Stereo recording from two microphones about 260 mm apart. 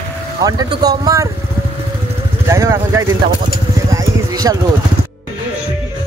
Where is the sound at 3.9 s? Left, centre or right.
Centre.